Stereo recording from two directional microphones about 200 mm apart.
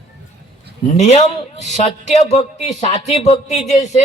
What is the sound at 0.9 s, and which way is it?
A man's voice, 35° left (ahead or behind).